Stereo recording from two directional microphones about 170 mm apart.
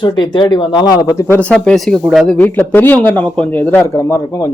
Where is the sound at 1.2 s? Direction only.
10° left (ahead or behind).